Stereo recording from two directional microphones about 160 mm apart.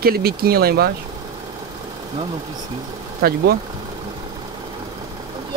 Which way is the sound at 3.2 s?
70° right (ahead or behind).